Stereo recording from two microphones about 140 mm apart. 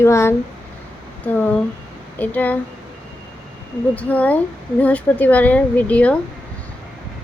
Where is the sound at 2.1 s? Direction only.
10° left (ahead or behind).